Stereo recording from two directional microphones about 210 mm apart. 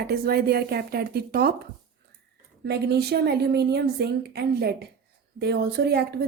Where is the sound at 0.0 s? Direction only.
50° right (ahead or behind).